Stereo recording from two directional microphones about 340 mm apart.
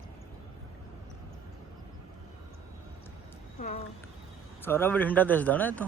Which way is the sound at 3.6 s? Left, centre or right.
Left.